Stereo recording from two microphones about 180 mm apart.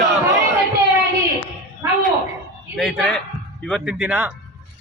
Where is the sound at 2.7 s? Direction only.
Centre (ahead or behind).